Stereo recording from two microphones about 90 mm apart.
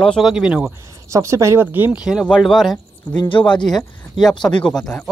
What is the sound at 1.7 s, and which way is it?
Speech, 20° right (ahead or behind).